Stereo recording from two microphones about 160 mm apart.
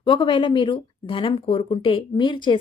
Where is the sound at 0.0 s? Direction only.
30° left (ahead or behind).